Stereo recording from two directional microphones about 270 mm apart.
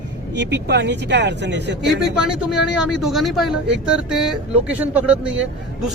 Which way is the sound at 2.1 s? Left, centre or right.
Centre.